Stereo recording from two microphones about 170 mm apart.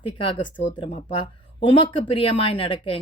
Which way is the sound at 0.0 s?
30° left (ahead or behind).